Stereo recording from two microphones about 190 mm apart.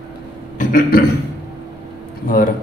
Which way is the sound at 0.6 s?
45° left (ahead or behind).